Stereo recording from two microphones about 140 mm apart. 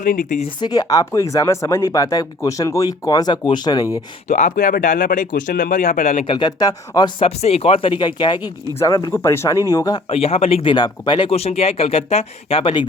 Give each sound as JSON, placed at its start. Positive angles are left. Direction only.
{"t": 0.0, "sound": "speech", "side_deg": 70}
{"t": 0.6, "sound": "speech", "side_deg": 30}
{"t": 4.3, "sound": "speech", "side_deg": 60}
{"t": 6.2, "sound": "speech", "side_deg": 30}
{"t": 7.2, "sound": "speech", "side_deg": 45}
{"t": 10.1, "sound": "speech", "side_deg": 45}